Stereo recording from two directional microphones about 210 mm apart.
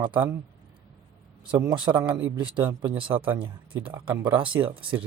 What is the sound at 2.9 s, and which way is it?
Speech, 25° right (ahead or behind).